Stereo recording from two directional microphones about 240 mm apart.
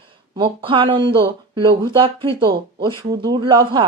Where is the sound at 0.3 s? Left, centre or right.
Right.